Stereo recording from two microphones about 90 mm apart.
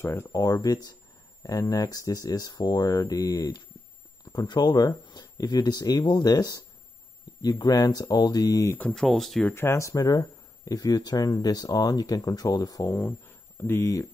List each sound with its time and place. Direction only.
0.0 s speech: 30° left (ahead or behind)
0.3 s speech: 40° left (ahead or behind)
8.9 s speech: centre (ahead or behind)
9.5 s speech: 30° left (ahead or behind); by 12.8 s 45° left (ahead or behind)
12.8 s speech: 30° left (ahead or behind)